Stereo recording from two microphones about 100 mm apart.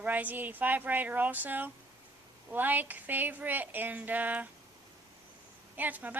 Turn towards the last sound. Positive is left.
turn(degrees=-15)  # may be behind; listen again after turning